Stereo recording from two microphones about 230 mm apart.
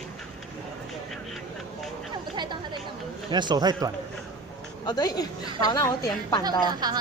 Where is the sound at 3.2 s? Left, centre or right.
Centre.